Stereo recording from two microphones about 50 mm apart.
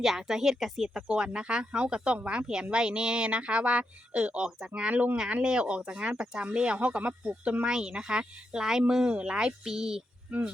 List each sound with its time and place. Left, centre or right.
0.0 s speech: centre
1.0 s speech: right
10.2 s speech: right